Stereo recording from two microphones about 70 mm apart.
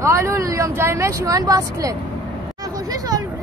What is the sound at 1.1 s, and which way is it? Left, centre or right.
Speech, right.